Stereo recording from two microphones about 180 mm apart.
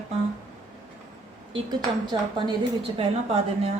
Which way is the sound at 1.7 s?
25° right (ahead or behind).